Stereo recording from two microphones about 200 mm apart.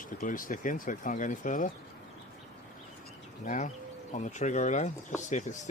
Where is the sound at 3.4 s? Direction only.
35° left (ahead or behind).